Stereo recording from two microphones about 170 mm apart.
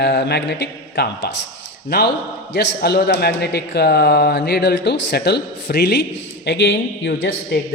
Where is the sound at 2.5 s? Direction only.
80° left.